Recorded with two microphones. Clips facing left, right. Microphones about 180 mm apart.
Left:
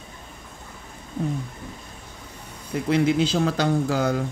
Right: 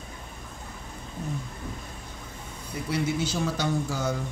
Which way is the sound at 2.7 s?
60° left (ahead or behind).